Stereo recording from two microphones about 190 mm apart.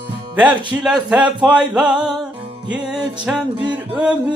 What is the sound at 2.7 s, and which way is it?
Music, 5° right (ahead or behind).